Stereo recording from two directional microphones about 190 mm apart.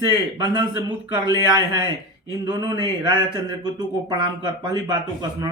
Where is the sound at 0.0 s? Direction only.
20° right (ahead or behind).